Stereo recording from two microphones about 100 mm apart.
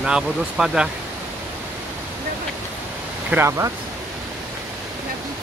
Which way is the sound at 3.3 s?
25° right (ahead or behind).